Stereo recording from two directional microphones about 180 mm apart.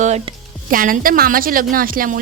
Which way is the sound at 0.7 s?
50° right (ahead or behind).